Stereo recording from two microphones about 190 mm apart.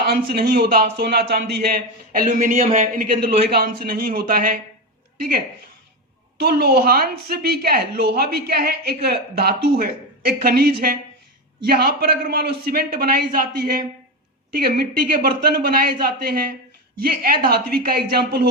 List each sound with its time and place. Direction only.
0.1 s speech: 60° right (ahead or behind)
6.4 s a woman's voice: 55° right (ahead or behind)